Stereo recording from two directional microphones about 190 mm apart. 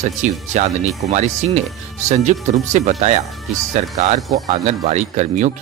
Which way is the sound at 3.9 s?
35° right (ahead or behind).